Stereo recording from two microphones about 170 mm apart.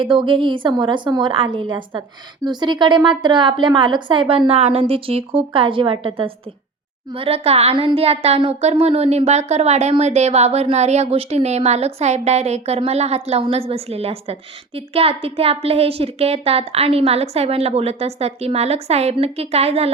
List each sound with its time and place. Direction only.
0.0 s a woman's voice: 30° right (ahead or behind)